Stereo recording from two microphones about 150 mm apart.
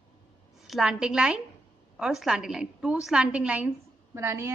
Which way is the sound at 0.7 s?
5° right (ahead or behind).